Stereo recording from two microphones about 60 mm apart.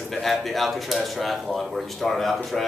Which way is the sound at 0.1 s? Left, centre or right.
Centre.